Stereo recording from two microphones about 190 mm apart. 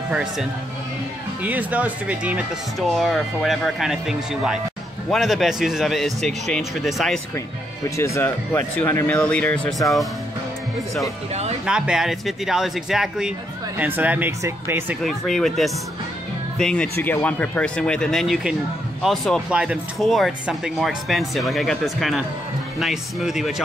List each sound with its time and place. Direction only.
0.1 s speech: 5° right (ahead or behind)
8.0 s speech: 10° left (ahead or behind)
11.6 s speech: 5° right (ahead or behind)
15.0 s speech: centre (ahead or behind)